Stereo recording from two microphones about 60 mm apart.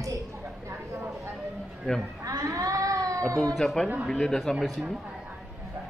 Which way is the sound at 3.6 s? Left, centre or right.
Centre.